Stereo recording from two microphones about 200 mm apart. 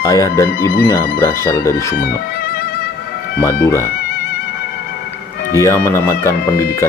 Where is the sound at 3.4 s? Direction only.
15° left (ahead or behind).